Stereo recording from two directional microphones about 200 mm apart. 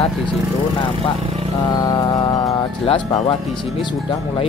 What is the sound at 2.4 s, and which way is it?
Speech, 25° left (ahead or behind).